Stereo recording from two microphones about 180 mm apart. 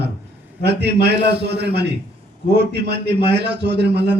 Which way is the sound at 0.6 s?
65° right (ahead or behind).